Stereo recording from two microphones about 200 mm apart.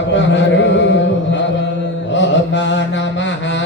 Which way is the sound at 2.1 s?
65° left (ahead or behind).